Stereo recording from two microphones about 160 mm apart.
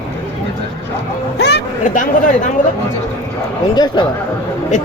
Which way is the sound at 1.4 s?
90° left.